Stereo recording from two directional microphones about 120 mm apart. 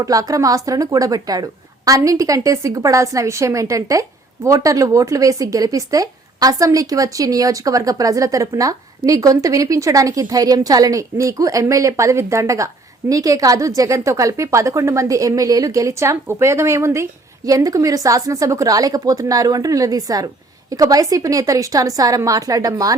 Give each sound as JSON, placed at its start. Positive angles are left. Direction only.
{"t": 0.0, "sound": "speech", "side_deg": -30}